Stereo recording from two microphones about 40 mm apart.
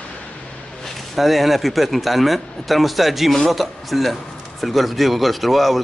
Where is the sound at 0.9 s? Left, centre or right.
Centre.